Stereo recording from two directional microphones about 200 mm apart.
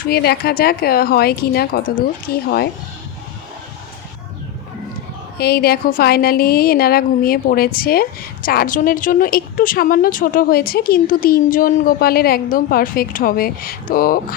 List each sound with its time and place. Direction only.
0.0 s a woman's voice: 50° left (ahead or behind)
5.4 s a woman's voice: 50° left (ahead or behind)